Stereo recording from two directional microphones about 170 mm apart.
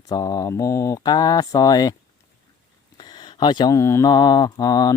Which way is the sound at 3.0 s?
25° left (ahead or behind).